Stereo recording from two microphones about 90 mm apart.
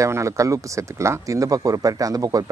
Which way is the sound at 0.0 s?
35° right (ahead or behind).